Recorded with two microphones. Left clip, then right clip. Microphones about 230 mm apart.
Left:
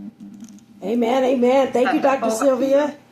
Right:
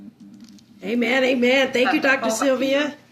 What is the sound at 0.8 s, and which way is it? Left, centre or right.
Speech, centre.